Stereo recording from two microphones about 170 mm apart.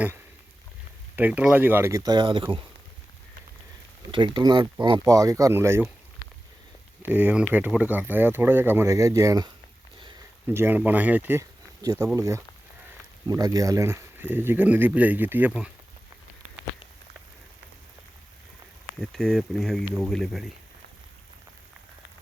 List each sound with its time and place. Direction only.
1.1 s speech: 10° right (ahead or behind); by 2.4 s 25° right (ahead or behind)
4.1 s speech: 30° right (ahead or behind)
7.0 s speech: 10° right (ahead or behind)
19.1 s speech: centre (ahead or behind)